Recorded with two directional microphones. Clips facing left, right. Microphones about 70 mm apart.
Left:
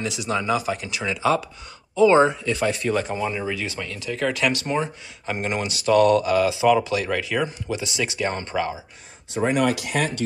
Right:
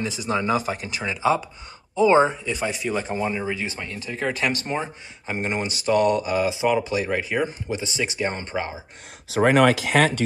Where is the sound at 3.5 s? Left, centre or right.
Right.